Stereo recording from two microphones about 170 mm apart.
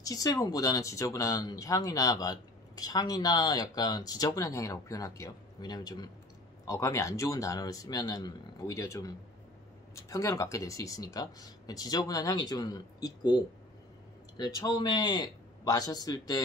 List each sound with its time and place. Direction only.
0.0 s speech: 20° left (ahead or behind)